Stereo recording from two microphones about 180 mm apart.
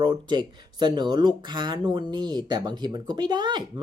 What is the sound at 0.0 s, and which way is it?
Speech, 25° right (ahead or behind).